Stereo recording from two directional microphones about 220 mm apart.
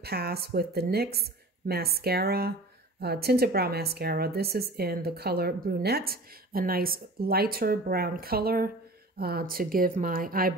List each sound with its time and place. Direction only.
0.0 s a woman's voice: 45° right (ahead or behind)